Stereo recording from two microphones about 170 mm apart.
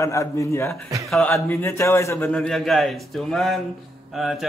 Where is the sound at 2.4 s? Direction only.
Centre (ahead or behind).